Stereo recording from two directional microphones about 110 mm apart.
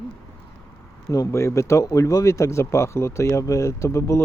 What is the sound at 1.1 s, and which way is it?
Speech, 30° left (ahead or behind).